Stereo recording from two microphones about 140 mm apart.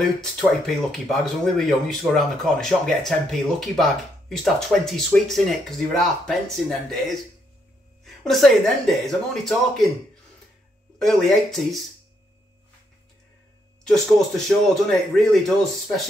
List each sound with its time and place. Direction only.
0.2 s speech: centre (ahead or behind)
11.0 s speech: centre (ahead or behind)
13.8 s speech: 5° left (ahead or behind)